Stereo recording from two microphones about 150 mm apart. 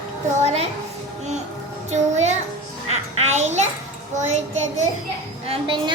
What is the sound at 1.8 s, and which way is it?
Child singing, 50° right (ahead or behind).